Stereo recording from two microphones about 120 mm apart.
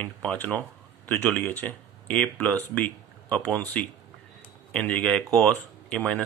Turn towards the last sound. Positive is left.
turn(degrees=10)  # may be behind; listen again after turning